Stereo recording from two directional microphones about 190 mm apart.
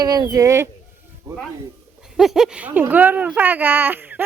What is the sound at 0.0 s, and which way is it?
Speech, 20° right (ahead or behind).